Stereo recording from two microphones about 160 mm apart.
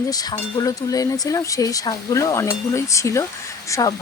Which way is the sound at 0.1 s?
25° left (ahead or behind).